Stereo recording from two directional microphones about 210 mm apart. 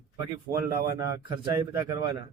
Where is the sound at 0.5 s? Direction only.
15° right (ahead or behind).